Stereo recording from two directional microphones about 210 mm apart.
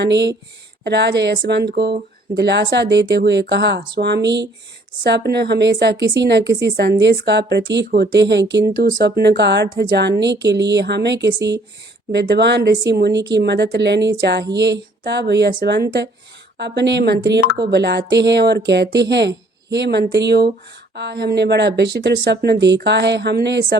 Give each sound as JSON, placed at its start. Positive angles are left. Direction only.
{"t": 0.0, "sound": "speech", "side_deg": -55}